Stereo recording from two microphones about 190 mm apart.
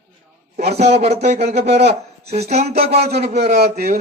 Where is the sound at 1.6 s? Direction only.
60° right (ahead or behind).